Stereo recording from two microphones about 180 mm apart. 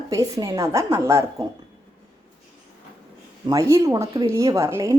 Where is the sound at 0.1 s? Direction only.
20° right (ahead or behind).